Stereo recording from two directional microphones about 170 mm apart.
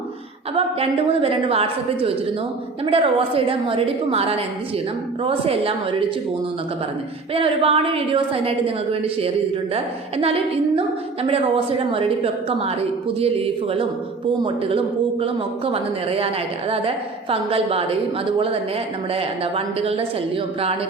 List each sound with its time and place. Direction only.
0.5 s a man's voice: 35° right (ahead or behind)
7.3 s a man's voice: 35° right (ahead or behind)